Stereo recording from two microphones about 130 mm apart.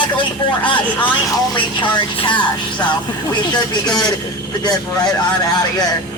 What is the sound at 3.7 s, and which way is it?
Speech, 30° left (ahead or behind).